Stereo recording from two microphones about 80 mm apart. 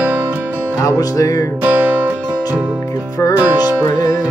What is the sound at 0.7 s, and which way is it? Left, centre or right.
Music, left.